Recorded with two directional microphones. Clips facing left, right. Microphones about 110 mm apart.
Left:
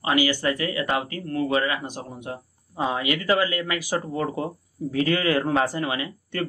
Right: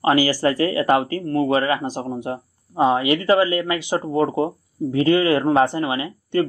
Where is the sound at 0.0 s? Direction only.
35° right (ahead or behind).